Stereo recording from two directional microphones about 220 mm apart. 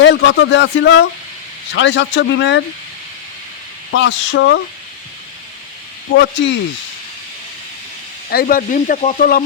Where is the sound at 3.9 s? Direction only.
55° left (ahead or behind).